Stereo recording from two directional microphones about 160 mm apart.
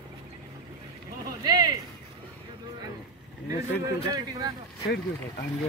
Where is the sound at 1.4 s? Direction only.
25° right (ahead or behind).